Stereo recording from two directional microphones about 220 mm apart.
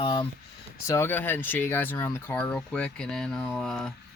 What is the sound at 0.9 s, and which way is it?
Speech, 10° left (ahead or behind).